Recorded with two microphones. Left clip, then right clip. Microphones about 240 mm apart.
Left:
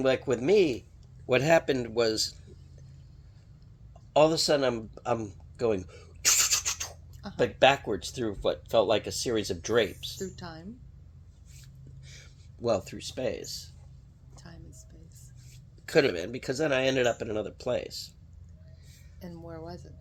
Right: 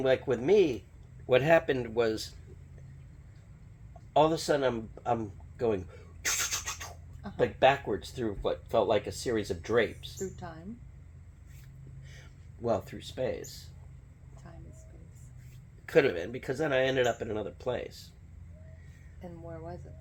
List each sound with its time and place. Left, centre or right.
0.0 s speech: left
4.1 s a woman's voice: left
12.6 s speech: left
15.9 s speech: left
19.2 s a woman's voice: left